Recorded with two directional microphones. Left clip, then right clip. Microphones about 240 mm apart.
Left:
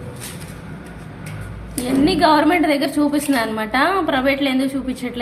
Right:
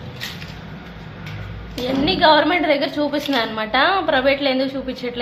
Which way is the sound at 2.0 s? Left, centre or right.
Centre.